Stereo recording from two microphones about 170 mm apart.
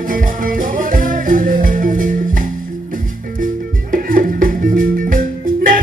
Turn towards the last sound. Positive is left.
turn(degrees=-55)  # may be behind; listen again after turning